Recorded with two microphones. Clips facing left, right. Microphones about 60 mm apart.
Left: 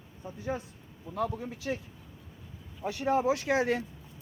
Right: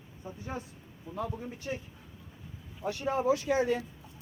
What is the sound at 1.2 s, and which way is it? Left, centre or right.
Speech, left.